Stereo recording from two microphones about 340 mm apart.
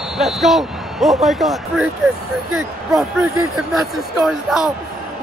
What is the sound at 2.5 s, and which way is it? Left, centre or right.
Speech, centre.